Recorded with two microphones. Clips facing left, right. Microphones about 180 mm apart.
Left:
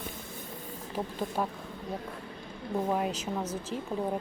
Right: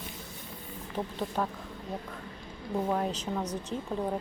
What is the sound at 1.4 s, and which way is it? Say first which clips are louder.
Speech: even; 10° left (ahead or behind).